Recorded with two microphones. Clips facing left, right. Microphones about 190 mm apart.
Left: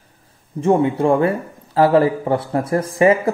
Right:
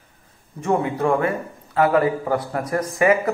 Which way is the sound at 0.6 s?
30° left (ahead or behind).